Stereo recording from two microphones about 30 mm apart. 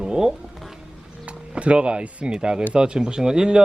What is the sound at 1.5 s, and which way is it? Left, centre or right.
Speech, right.